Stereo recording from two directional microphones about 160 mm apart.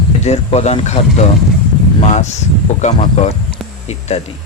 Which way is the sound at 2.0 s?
45° left (ahead or behind).